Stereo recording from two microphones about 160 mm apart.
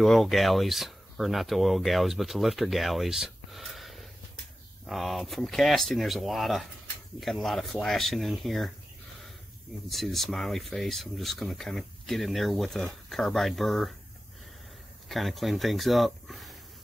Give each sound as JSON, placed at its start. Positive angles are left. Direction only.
{"t": 0.0, "sound": "speech", "side_deg": 0}
{"t": 9.8, "sound": "speech", "side_deg": 0}
{"t": 15.0, "sound": "speech", "side_deg": 0}